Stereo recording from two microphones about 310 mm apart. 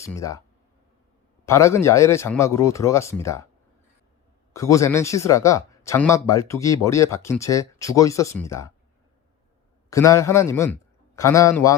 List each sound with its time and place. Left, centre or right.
0.0 s speech: centre
1.5 s speech: centre
4.5 s speech: centre
9.9 s a man's voice: centre